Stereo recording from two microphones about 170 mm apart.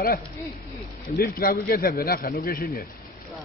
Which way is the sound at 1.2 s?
60° left (ahead or behind).